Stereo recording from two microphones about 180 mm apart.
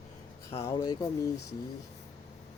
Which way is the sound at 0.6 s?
20° left (ahead or behind).